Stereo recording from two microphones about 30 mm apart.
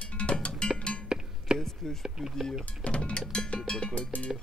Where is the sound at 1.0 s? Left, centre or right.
Right.